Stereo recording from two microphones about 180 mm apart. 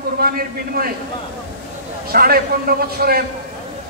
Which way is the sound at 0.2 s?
55° right (ahead or behind).